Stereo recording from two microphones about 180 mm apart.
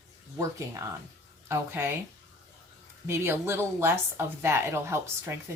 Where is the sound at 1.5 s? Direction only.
10° right (ahead or behind).